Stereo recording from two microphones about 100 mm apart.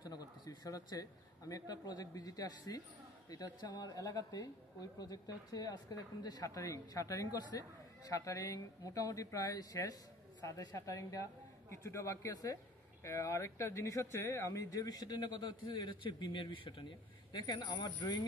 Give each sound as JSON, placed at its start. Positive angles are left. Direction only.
{"t": 0.0, "sound": "a sound", "side_deg": 40}
{"t": 1.5, "sound": "speech", "side_deg": 40}
{"t": 17.3, "sound": "speech", "side_deg": 45}